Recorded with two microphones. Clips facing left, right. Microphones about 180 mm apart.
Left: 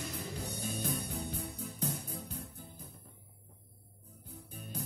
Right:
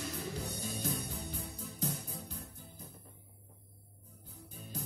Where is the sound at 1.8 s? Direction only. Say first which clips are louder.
Even; 60° left (ahead or behind).